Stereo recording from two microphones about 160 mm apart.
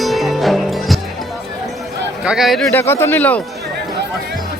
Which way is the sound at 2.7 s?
15° left (ahead or behind).